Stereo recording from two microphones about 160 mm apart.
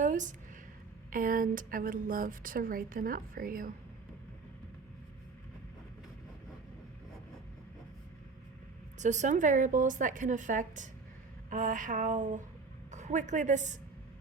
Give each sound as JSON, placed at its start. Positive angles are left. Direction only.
{"t": 0.0, "sound": "a sound", "side_deg": -50}
{"t": 1.1, "sound": "speech", "side_deg": -60}
{"t": 9.0, "sound": "a woman's voice", "side_deg": -50}